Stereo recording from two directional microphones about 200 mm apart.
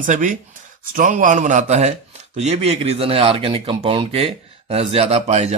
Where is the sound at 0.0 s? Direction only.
40° right (ahead or behind).